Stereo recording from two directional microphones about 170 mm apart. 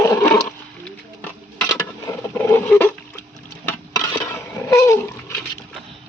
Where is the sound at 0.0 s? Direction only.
15° left (ahead or behind).